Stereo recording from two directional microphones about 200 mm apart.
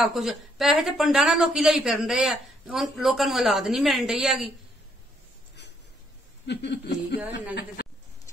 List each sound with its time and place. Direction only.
0.0 s a woman's voice: centre (ahead or behind)
6.4 s speech: 60° left (ahead or behind)